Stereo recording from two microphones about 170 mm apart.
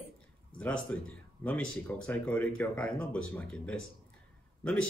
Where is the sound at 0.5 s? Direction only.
5° left (ahead or behind).